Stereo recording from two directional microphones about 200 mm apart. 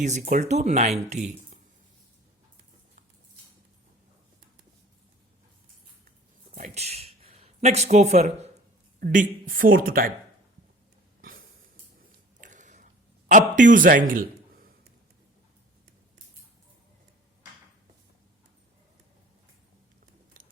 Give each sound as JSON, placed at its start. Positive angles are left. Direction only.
{"t": 0.0, "sound": "speech", "side_deg": -35}
{"t": 6.5, "sound": "speech", "side_deg": -40}
{"t": 12.4, "sound": "a sound", "side_deg": -40}